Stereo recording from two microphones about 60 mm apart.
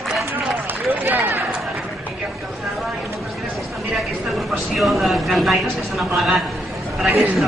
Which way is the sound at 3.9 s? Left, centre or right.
Centre.